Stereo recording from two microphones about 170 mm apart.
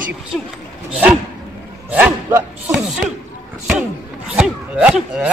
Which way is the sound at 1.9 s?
10° right (ahead or behind).